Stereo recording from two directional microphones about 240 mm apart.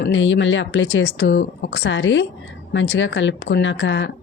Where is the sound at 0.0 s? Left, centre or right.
Left.